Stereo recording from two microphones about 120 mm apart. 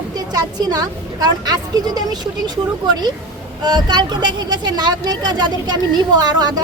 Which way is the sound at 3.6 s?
40° right (ahead or behind).